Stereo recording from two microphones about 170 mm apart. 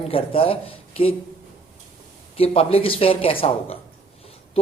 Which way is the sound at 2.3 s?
35° left (ahead or behind).